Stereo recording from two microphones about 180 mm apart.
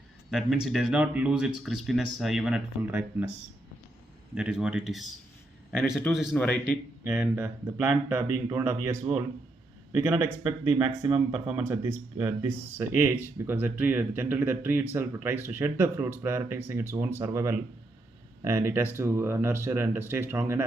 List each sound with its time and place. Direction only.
0.3 s speech: centre (ahead or behind)
4.4 s speech: 5° right (ahead or behind)
6.3 s a man's voice: 5° left (ahead or behind)
7.1 s speech: 5° right (ahead or behind)